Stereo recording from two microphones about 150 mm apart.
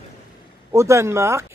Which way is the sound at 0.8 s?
20° right (ahead or behind).